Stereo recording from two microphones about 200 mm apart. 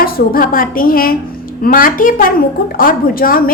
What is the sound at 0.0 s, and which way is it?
A woman's voice, 45° left (ahead or behind).